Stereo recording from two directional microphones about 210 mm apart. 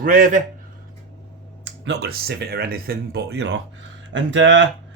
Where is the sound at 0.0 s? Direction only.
40° right (ahead or behind).